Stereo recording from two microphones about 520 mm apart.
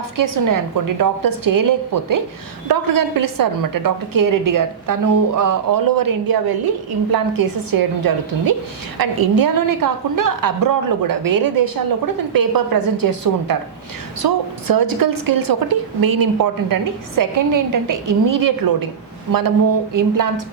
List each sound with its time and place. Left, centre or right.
0.2 s a woman's voice: right
19.9 s a woman's voice: right